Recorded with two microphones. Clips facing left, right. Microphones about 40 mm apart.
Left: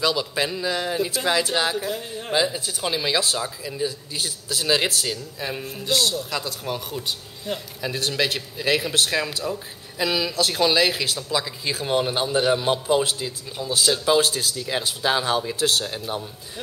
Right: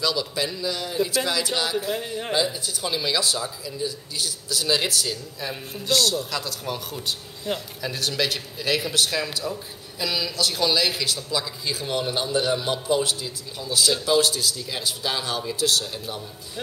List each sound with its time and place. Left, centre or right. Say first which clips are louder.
0.0 s a man's voice: left 2 dB; left
1.9 s a man's voice: right 2 dB; centre
2.5 s speech: left 2 dB; left
2.9 s a man's voice: left 1 dB; left
5.1 s speech: left 2 dB; centre
7.5 s speech: right 1 dB; centre
7.8 s a man's voice: left 3 dB; centre; by 11.1 s left
11.1 s a man's voice: left 2 dB; centre; by 16.2 s left